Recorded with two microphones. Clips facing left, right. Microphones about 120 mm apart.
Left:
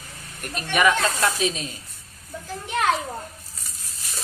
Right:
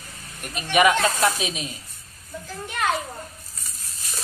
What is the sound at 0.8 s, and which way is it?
Speech, 20° right (ahead or behind).